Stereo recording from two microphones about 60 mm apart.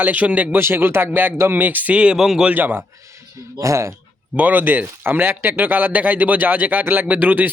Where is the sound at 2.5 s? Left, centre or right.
Right.